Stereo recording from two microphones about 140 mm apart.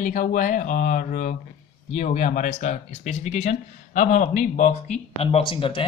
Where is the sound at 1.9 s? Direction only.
60° left (ahead or behind).